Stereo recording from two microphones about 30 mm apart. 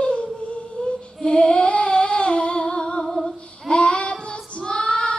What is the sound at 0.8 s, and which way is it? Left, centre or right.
Female singing, left.